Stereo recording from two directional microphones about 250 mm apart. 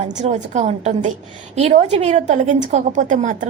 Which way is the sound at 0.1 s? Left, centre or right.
Right.